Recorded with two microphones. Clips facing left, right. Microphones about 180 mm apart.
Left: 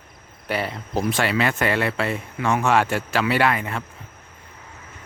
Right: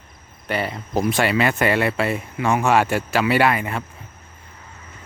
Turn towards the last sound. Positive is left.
turn(degrees=-10)  # may be behind; listen again after turning